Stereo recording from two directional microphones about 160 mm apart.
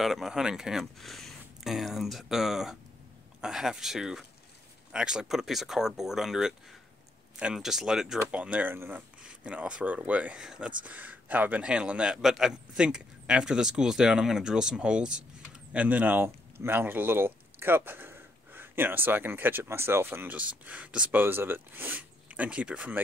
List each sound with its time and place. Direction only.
0.0 s a man's voice: centre (ahead or behind)